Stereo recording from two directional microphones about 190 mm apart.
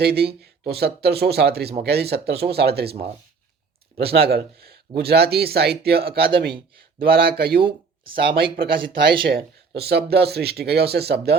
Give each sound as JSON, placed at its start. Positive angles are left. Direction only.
{"t": 0.0, "sound": "speech", "side_deg": -55}
{"t": 3.9, "sound": "speech", "side_deg": -55}
{"t": 8.0, "sound": "speech", "side_deg": -25}
{"t": 9.2, "sound": "speech", "side_deg": -55}